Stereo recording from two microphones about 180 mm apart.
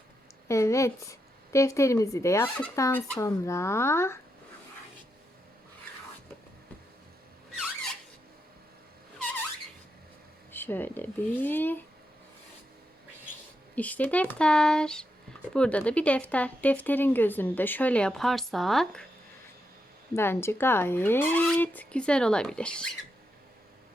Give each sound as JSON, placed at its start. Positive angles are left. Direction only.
{"t": 0.4, "sound": "speech", "side_deg": 15}
{"t": 10.5, "sound": "speech", "side_deg": 10}
{"t": 13.7, "sound": "speech", "side_deg": 10}
{"t": 20.1, "sound": "speech", "side_deg": 15}